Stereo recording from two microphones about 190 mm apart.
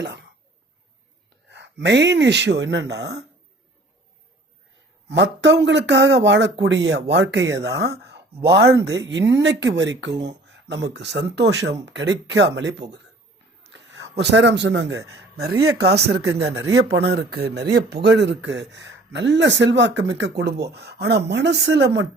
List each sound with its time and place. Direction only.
0.0 s speech: 65° right (ahead or behind)
1.5 s a man's voice: 65° right (ahead or behind)
5.0 s a man's voice: 65° right (ahead or behind)